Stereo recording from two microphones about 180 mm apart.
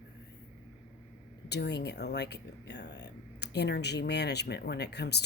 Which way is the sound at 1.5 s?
70° left (ahead or behind).